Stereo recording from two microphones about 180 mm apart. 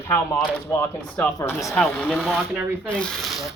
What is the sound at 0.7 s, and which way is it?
Speech, 15° left (ahead or behind).